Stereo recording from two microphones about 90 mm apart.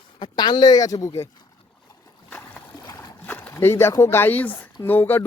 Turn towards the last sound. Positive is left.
turn(degrees=20)  # may be behind; listen again after turning